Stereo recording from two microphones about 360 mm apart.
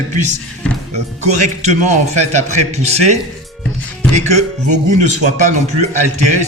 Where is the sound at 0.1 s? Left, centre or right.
Centre.